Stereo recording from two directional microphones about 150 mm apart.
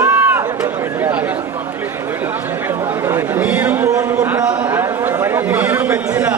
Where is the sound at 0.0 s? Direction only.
15° right (ahead or behind).